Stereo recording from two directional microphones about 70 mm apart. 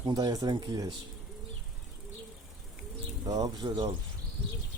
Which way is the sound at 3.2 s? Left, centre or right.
Right.